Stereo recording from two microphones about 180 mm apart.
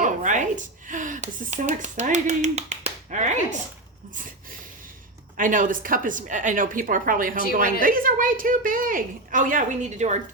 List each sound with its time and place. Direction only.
0.0 s speech: 45° right (ahead or behind)
5.4 s a woman's voice: 50° right (ahead or behind)